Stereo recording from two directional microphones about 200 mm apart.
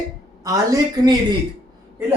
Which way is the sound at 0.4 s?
15° right (ahead or behind).